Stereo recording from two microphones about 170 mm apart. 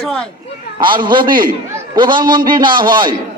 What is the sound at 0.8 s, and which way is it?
A man's voice, 30° right (ahead or behind).